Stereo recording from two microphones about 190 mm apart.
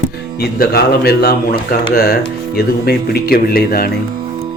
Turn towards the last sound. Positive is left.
turn(degrees=50)  # may be behind; listen again after turning